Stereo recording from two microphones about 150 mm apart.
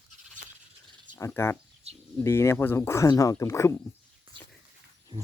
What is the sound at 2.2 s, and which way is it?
Speech, 15° left (ahead or behind).